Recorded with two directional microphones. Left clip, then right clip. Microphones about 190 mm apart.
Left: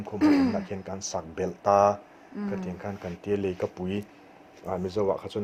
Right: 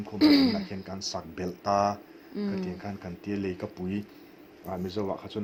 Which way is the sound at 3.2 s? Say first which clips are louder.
Left 6 dB; 45° left (ahead or behind).